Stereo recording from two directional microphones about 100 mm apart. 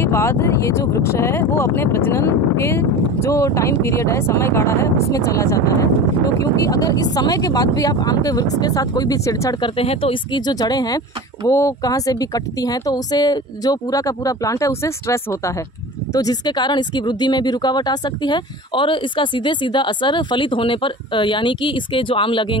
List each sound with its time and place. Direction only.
0.0 s speech: 25° left (ahead or behind)
9.6 s speech: 75° left (ahead or behind)
10.3 s speech: 40° left (ahead or behind)